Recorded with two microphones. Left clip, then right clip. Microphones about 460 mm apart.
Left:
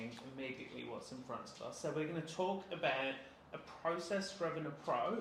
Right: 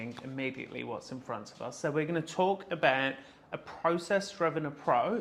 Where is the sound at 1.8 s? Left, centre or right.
Right.